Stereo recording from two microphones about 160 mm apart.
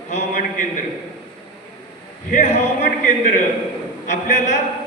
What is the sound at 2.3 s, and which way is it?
Speech, 50° left (ahead or behind).